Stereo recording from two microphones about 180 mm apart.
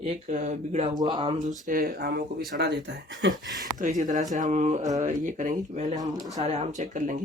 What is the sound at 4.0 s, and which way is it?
Speech, 45° right (ahead or behind).